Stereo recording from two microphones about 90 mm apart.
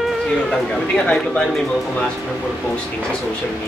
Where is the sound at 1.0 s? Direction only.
15° left (ahead or behind).